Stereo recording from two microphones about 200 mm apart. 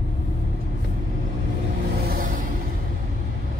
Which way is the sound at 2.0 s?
45° right (ahead or behind).